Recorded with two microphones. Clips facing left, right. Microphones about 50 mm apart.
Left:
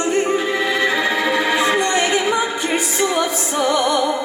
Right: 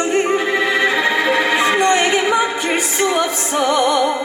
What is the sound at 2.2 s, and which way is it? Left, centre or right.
Music, centre.